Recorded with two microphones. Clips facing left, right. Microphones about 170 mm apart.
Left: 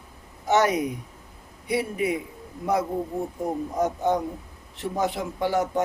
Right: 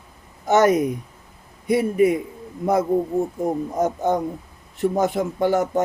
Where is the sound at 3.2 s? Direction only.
45° right (ahead or behind).